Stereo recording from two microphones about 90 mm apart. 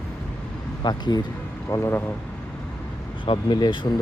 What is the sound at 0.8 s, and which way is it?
Speech, 50° left (ahead or behind).